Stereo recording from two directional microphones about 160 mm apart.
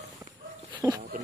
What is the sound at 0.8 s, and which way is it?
Dog, 25° right (ahead or behind).